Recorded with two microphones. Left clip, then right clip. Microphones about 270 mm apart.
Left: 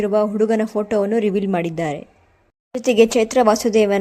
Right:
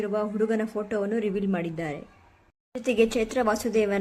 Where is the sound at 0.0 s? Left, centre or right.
Left.